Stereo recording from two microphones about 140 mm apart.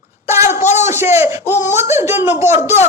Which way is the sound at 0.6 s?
55° left (ahead or behind).